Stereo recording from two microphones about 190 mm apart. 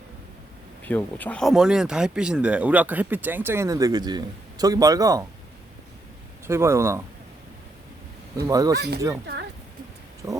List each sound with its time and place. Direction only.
0.9 s speech: 10° left (ahead or behind); by 5.2 s 20° right (ahead or behind)
6.5 s speech: 15° right (ahead or behind)
8.4 s speech: 20° right (ahead or behind)
9.2 s a sound: 60° right (ahead or behind)
10.2 s vehicle: 20° right (ahead or behind)